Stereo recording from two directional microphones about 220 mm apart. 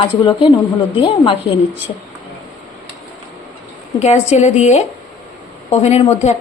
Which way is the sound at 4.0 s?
30° left (ahead or behind).